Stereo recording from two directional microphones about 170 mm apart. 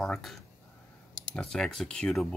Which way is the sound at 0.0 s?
Centre (ahead or behind).